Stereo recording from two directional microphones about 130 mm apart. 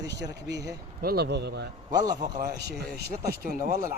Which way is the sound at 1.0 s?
90° right.